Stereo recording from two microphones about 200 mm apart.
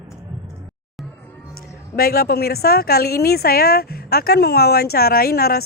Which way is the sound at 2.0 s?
50° left (ahead or behind).